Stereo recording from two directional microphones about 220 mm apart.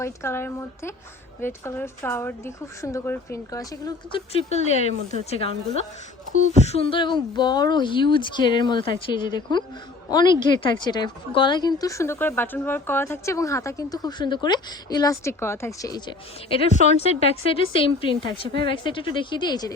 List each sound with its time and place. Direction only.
0.0 s a woman's voice: 10° left (ahead or behind)